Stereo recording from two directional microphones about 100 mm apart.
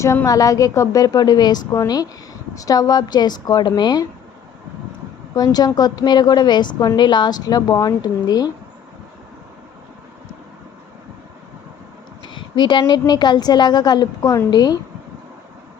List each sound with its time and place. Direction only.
0.3 s a woman's voice: 35° left (ahead or behind)
5.3 s a woman's voice: 40° left (ahead or behind)
12.2 s a sound: 50° left (ahead or behind)
12.9 s a woman's voice: 45° left (ahead or behind)